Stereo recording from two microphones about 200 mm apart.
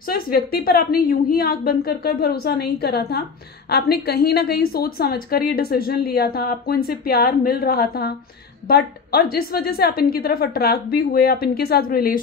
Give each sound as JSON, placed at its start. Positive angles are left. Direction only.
{"t": 0.1, "sound": "a woman's voice", "side_deg": 50}